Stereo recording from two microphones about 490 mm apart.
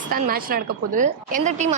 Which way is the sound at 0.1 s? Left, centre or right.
Centre.